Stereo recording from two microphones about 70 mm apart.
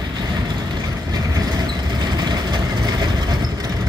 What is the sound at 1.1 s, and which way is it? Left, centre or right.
Vehicle, right.